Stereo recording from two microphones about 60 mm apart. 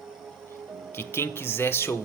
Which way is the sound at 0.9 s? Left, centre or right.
Left.